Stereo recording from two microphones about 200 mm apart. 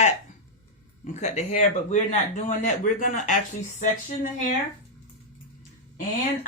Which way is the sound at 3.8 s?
40° left (ahead or behind).